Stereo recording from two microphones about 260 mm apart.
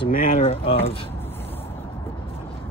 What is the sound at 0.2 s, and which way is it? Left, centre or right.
Speech, left.